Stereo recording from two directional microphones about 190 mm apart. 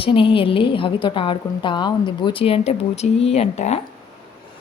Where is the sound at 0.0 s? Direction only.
25° left (ahead or behind).